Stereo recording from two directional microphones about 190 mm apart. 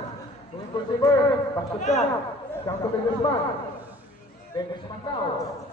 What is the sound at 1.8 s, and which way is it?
Speech, 40° left (ahead or behind).